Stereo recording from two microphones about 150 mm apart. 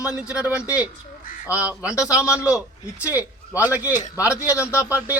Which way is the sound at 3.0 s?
20° left (ahead or behind).